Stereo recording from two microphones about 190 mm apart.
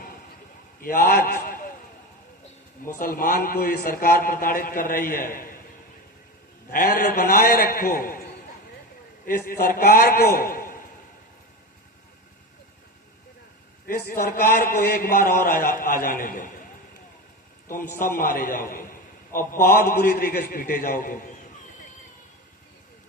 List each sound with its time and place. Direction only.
0.8 s a sound: 50° left (ahead or behind)
3.0 s a man's voice: 50° left (ahead or behind)
6.7 s a man's voice: 50° left (ahead or behind)
9.2 s a man's voice: 50° left (ahead or behind)
13.8 s a man's voice: 50° left (ahead or behind)
18.0 s a man's voice: 50° left (ahead or behind)